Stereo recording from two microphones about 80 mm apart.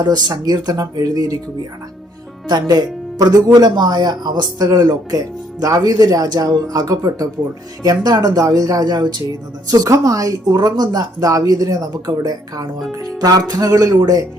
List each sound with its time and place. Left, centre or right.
0.0 s speech: right
2.5 s speech: right